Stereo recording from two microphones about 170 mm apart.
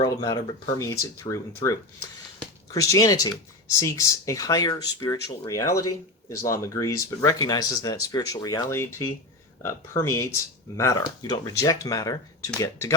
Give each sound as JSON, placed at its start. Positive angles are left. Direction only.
{"t": 0.0, "sound": "speech", "side_deg": 25}
{"t": 2.7, "sound": "speech", "side_deg": 20}